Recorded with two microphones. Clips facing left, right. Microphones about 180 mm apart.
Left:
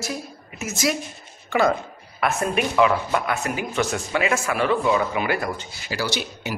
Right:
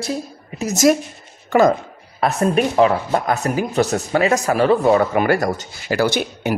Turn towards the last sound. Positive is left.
turn(degrees=-55)  # may be behind; listen again after turning